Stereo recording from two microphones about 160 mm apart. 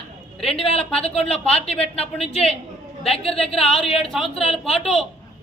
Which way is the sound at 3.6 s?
Centre (ahead or behind).